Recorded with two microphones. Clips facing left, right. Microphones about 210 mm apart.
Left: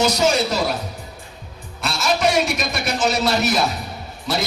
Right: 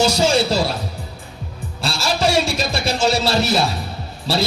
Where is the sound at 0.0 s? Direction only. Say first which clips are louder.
Right 2 dB; 30° right (ahead or behind).